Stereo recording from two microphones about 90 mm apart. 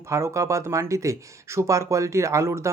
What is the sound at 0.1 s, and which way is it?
Speech, 35° right (ahead or behind).